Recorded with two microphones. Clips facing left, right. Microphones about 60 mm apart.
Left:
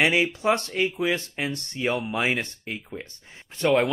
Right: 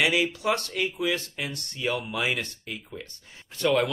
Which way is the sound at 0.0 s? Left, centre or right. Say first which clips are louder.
Left 3 dB; left.